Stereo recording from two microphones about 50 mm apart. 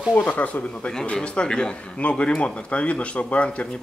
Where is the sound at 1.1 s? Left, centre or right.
Centre.